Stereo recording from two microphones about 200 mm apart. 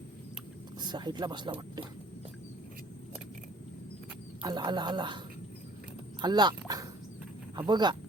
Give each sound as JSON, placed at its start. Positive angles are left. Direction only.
{"t": 0.9, "sound": "speech", "side_deg": -20}
{"t": 4.4, "sound": "speech", "side_deg": -20}
{"t": 6.2, "sound": "speech", "side_deg": -20}